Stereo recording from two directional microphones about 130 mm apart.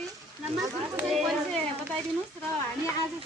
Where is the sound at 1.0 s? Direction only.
Centre (ahead or behind).